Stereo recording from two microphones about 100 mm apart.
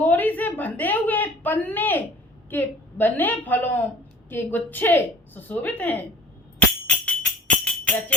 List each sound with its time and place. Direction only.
0.0 s a sound: 15° left (ahead or behind)
2.5 s a woman's voice: 20° left (ahead or behind)
6.8 s jingle bell: 15° left (ahead or behind)